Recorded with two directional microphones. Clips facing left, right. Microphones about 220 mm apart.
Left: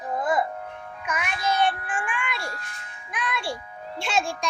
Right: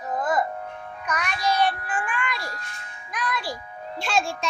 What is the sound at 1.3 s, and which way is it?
Child singing, 25° left (ahead or behind).